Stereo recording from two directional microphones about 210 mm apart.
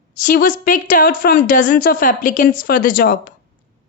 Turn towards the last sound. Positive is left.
turn(degrees=45)  # may be behind; listen again after turning